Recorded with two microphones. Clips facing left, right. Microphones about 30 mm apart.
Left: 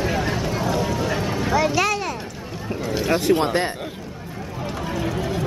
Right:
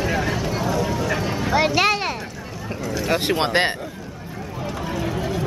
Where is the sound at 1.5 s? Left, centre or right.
Right.